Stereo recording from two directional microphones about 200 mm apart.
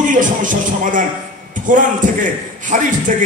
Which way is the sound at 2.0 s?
40° right (ahead or behind).